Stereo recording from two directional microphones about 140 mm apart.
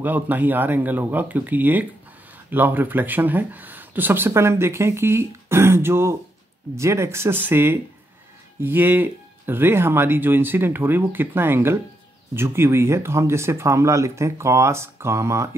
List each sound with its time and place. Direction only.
0.0 s speech: 10° right (ahead or behind)